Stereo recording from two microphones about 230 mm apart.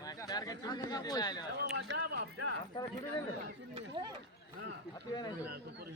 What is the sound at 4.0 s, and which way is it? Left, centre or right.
Speech, centre.